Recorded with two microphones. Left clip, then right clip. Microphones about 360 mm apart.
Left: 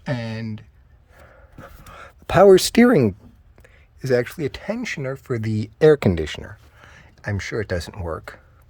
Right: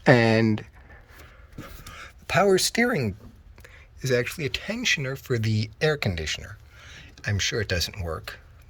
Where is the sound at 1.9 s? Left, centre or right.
Centre.